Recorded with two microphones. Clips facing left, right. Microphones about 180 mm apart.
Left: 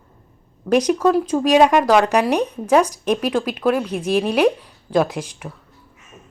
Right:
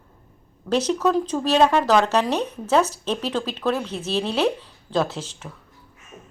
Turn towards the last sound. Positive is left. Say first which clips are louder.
# left 4 dB
turn(degrees=10)  # may be behind; listen again after turning